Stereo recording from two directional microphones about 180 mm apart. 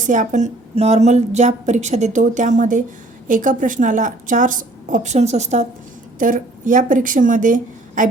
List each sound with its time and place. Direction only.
0.0 s a woman's voice: 45° right (ahead or behind)